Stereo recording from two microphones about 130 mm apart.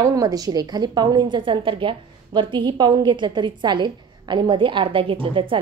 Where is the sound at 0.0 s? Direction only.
25° right (ahead or behind).